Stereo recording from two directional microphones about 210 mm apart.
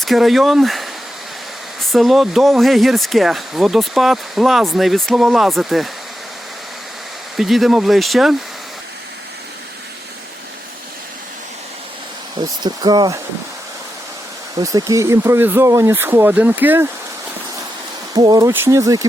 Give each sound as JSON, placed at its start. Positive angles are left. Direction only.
{"t": 0.0, "sound": "speech", "side_deg": 0}
{"t": 1.9, "sound": "speech", "side_deg": 0}
{"t": 7.3, "sound": "speech", "side_deg": 0}
{"t": 12.4, "sound": "speech", "side_deg": -25}
{"t": 14.6, "sound": "speech", "side_deg": -15}
{"t": 18.1, "sound": "speech", "side_deg": -20}